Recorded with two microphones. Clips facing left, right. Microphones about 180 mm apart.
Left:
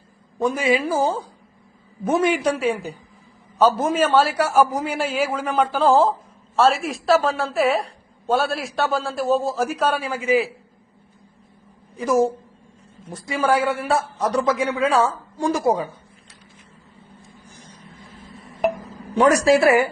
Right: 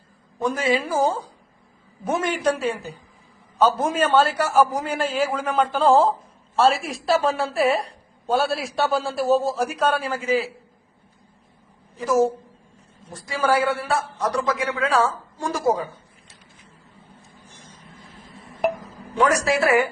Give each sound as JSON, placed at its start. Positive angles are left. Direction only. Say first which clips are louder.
{"t": 0.4, "sound": "a man's voice", "louder": "left 2 dB", "side_deg": 10}
{"t": 11.9, "sound": "a man's voice", "louder": "left 1 dB", "side_deg": 15}
{"t": 13.4, "sound": "a man's voice", "louder": "left 1 dB", "side_deg": 20}
{"t": 19.1, "sound": "a woman's voice", "louder": "left 5 dB", "side_deg": 25}